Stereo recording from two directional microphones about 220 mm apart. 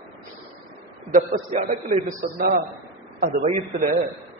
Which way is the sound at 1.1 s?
35° right (ahead or behind).